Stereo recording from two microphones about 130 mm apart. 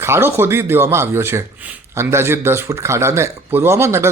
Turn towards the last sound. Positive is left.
turn(degrees=-20)  # may be behind; listen again after turning